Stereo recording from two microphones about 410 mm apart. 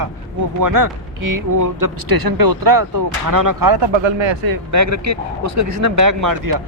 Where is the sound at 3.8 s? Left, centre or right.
Right.